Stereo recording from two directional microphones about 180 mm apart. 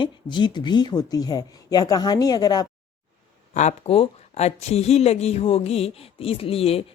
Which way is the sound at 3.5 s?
35° left (ahead or behind).